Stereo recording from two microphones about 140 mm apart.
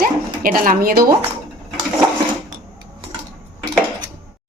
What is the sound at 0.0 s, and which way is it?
Bow-wow, 85° right.